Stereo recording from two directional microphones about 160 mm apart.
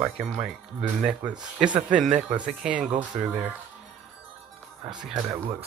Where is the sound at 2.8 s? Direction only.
50° right (ahead or behind).